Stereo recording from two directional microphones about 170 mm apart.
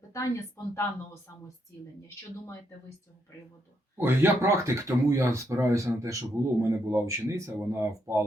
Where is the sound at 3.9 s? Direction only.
15° right (ahead or behind).